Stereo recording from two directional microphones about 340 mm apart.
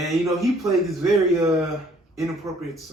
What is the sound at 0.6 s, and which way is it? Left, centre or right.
A man's voice, centre.